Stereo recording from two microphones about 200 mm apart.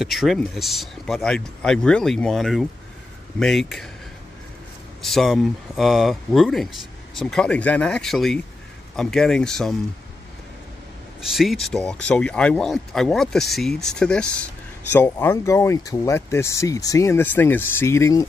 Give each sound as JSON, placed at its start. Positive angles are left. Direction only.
{"t": 0.0, "sound": "speech", "side_deg": 0}
{"t": 5.0, "sound": "speech", "side_deg": 0}
{"t": 11.1, "sound": "speech", "side_deg": 0}